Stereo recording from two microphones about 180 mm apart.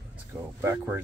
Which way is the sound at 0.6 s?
15° right (ahead or behind).